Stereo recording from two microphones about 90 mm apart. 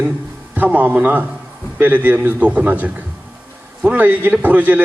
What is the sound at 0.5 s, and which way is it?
Speech, 20° right (ahead or behind).